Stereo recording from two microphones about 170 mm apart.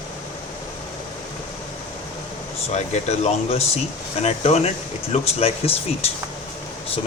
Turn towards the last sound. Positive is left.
turn(degrees=35)  # may be behind; listen again after turning